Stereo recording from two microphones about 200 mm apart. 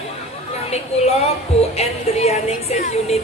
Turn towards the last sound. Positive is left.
turn(degrees=30)  # may be behind; listen again after turning